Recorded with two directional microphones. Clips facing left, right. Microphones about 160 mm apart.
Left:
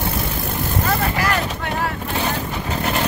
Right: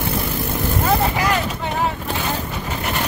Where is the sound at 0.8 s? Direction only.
20° right (ahead or behind).